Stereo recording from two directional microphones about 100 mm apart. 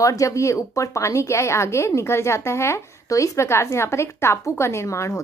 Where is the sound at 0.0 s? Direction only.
35° left (ahead or behind).